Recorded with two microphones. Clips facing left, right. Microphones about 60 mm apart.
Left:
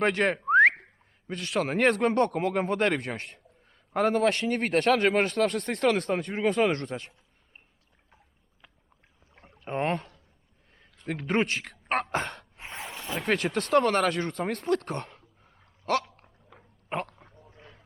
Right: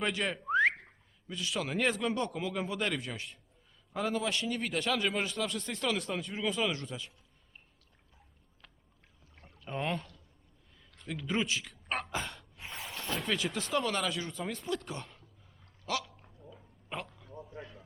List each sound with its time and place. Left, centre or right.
0.0 s a man's voice: left
0.5 s a sound: left
1.3 s a man's voice: left
9.3 s rowboat: left
11.0 s speech: left
12.5 s gasp: left
13.0 s a sound: centre
13.2 s a man's voice: left
16.6 s a sound: left